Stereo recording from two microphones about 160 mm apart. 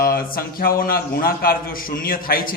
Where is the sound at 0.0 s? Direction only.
65° left (ahead or behind).